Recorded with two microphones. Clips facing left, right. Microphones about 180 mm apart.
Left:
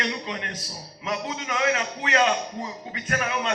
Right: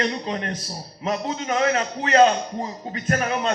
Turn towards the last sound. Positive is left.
turn(degrees=-40)  # may be behind; listen again after turning